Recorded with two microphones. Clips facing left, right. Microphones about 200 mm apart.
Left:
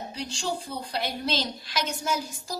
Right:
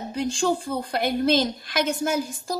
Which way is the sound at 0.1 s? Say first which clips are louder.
Right 10 dB; 50° right (ahead or behind).